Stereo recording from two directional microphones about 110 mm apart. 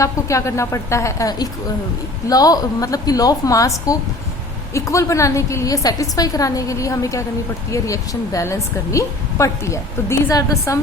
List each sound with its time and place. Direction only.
0.0 s a woman's voice: 30° left (ahead or behind)